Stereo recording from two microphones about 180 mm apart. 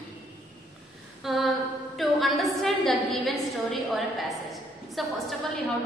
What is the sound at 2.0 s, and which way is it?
A woman's voice, centre (ahead or behind).